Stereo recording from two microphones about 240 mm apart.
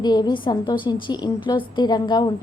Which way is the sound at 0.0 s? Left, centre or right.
Centre.